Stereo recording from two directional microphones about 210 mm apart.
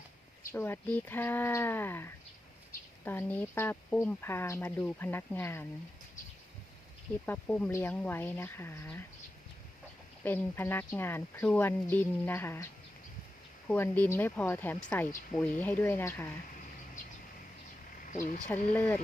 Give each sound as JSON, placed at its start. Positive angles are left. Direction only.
{"t": 0.5, "sound": "speech", "side_deg": 10}
{"t": 7.3, "sound": "speech", "side_deg": 10}
{"t": 10.2, "sound": "speech", "side_deg": 10}
{"t": 13.7, "sound": "speech", "side_deg": 10}
{"t": 18.1, "sound": "speech", "side_deg": 35}
{"t": 18.7, "sound": "speech", "side_deg": 10}